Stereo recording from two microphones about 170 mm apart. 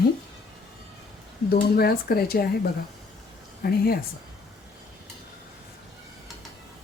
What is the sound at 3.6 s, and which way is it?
Speech, 60° left (ahead or behind).